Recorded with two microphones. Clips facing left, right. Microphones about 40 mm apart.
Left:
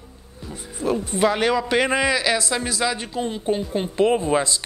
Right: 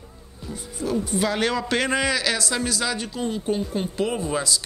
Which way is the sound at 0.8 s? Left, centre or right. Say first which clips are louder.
Left 4 dB; left.